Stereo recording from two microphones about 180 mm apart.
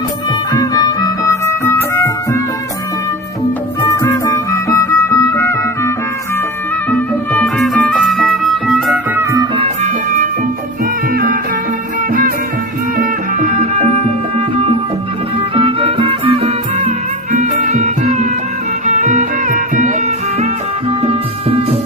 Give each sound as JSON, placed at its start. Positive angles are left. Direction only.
{"t": 0.5, "sound": "music", "side_deg": 20}
{"t": 3.8, "sound": "music", "side_deg": 15}
{"t": 6.9, "sound": "music", "side_deg": 5}
{"t": 9.3, "sound": "music", "side_deg": -20}
{"t": 9.6, "sound": "music", "side_deg": -40}
{"t": 11.1, "sound": "music", "side_deg": -55}
{"t": 13.0, "sound": "music", "side_deg": -40}